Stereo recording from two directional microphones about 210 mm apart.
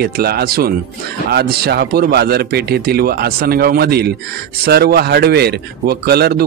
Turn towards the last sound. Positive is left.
turn(degrees=-50)  # may be behind; listen again after turning